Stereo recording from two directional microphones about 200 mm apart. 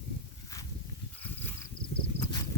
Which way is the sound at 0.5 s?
15° left (ahead or behind).